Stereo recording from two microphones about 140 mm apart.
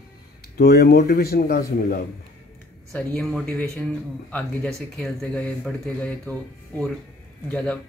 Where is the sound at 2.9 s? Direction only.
5° left (ahead or behind).